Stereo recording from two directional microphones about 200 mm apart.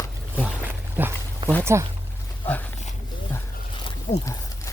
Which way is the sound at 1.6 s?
15° right (ahead or behind).